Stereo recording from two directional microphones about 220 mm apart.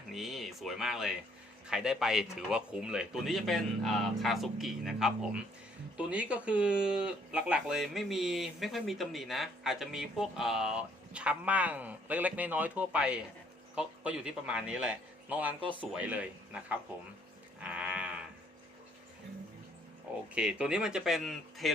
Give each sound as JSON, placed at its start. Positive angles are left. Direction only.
{"t": 0.1, "sound": "speech", "side_deg": 0}
{"t": 17.6, "sound": "livestock", "side_deg": -5}
{"t": 20.3, "sound": "speech", "side_deg": -5}